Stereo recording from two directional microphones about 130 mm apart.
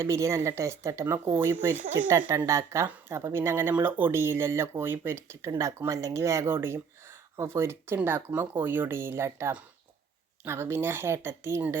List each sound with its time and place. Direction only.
0.0 s speech: 20° right (ahead or behind)